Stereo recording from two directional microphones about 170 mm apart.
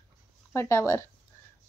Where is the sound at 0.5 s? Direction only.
15° left (ahead or behind).